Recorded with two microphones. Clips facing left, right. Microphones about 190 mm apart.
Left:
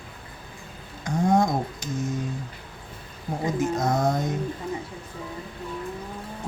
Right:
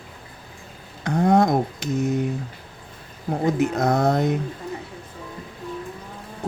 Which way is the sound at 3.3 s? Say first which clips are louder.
Right 4 dB; 65° right (ahead or behind).